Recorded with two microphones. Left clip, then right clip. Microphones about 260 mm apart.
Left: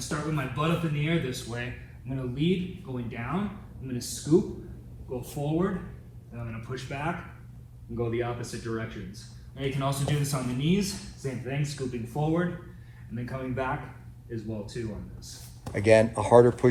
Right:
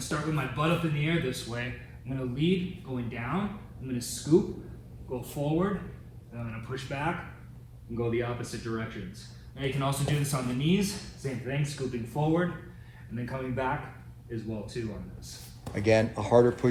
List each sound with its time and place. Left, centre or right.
0.0 s a man's voice: centre
15.7 s speech: left